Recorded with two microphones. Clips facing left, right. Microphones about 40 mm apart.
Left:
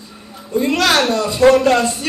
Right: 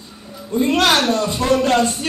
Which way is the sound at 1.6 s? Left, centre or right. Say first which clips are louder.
Left 2 dB; left.